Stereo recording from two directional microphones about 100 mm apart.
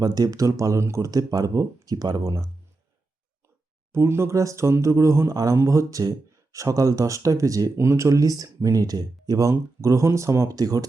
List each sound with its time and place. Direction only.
0.0 s speech: 40° right (ahead or behind)
3.9 s speech: 25° right (ahead or behind)